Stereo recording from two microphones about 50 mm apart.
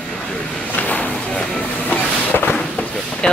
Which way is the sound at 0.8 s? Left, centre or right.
Left.